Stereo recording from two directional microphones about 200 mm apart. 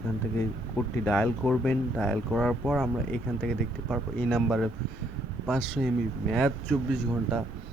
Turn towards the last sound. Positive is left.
turn(degrees=0)  # may be behind; listen again after turning